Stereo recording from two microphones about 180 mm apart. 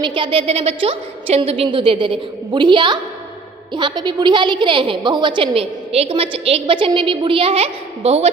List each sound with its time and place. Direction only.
0.0 s a woman's voice: 25° right (ahead or behind)